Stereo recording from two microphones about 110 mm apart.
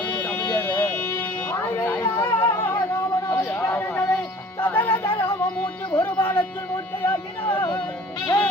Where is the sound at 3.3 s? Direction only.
20° left (ahead or behind).